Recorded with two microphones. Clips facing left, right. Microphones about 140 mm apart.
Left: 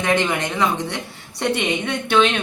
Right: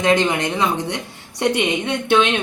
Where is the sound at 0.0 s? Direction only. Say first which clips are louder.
Right 3 dB; 20° right (ahead or behind).